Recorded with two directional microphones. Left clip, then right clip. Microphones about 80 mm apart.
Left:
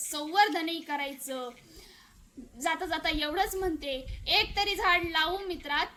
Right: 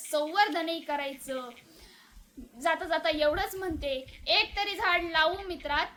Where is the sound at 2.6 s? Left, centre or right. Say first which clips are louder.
Right 2 dB; right.